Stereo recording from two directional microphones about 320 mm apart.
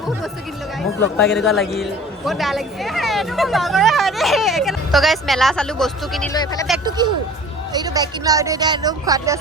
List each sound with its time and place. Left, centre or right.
0.8 s a man's voice: centre
6.3 s speech: centre
6.8 s speech: centre